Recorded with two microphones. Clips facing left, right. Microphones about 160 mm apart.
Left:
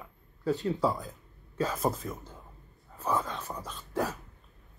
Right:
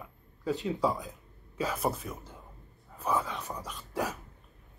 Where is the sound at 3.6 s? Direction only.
10° right (ahead or behind).